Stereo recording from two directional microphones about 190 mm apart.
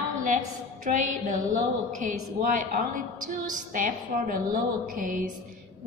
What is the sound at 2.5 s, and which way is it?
A woman's voice, 45° right (ahead or behind).